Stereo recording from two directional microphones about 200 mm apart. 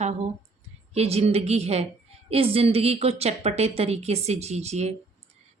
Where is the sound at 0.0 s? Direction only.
35° right (ahead or behind).